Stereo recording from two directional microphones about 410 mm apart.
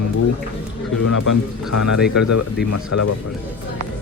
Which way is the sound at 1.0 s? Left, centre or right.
Left.